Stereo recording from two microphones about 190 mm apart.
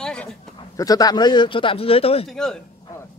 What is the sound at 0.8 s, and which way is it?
Speech, 20° left (ahead or behind).